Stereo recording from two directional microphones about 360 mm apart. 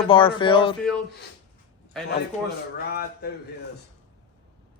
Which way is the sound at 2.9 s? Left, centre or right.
Left.